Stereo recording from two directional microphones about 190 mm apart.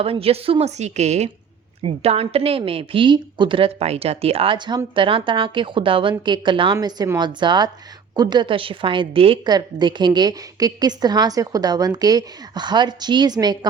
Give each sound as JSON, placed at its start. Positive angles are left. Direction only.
{"t": 0.0, "sound": "a woman's voice", "side_deg": -30}